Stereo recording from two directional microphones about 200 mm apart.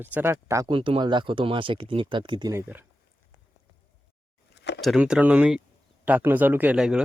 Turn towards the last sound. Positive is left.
turn(degrees=-5)  # may be behind; listen again after turning